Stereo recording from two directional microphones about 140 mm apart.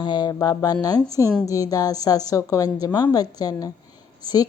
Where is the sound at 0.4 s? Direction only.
30° left (ahead or behind).